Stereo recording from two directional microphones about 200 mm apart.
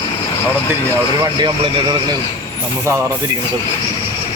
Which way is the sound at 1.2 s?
20° right (ahead or behind).